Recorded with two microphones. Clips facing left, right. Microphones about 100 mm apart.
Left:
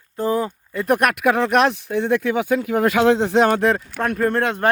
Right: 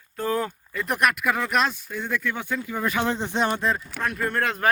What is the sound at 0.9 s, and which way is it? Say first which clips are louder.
Speech: left 6 dB; 50° left (ahead or behind).